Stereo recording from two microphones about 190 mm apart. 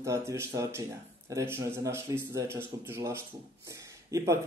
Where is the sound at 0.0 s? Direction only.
15° right (ahead or behind).